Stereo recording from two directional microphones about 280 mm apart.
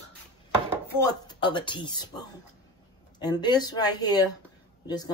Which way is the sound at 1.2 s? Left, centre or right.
Centre.